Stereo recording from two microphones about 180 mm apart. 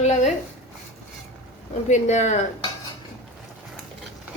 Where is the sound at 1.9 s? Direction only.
40° left (ahead or behind).